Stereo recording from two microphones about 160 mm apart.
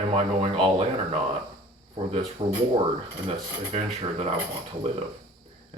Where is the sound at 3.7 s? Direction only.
40° right (ahead or behind).